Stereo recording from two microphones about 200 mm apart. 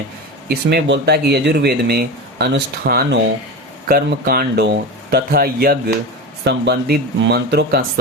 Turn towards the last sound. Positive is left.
turn(degrees=-55)  # may be behind; listen again after turning